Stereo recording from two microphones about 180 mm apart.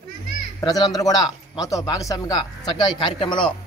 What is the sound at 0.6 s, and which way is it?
Speech, 20° left (ahead or behind).